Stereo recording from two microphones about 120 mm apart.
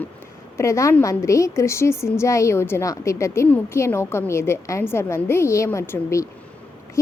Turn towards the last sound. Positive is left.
turn(degrees=25)  # may be behind; listen again after turning